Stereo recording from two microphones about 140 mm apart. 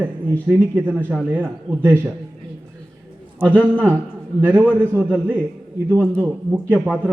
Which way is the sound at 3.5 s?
10° left (ahead or behind).